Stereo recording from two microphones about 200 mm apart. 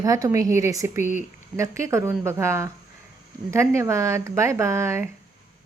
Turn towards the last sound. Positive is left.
turn(degrees=-15)  # may be behind; listen again after turning